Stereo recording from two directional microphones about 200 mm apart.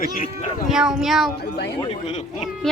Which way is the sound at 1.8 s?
30° left (ahead or behind).